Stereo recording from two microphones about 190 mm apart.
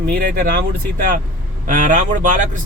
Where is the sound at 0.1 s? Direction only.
50° right (ahead or behind).